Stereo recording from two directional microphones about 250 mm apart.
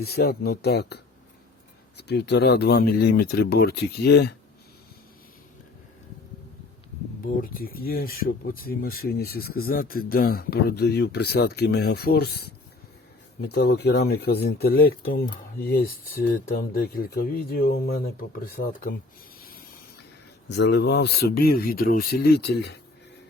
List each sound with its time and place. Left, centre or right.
0.0 s speech: left
7.4 s speech: left
20.5 s speech: left